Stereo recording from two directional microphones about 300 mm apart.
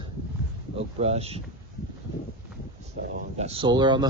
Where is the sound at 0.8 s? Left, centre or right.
Right.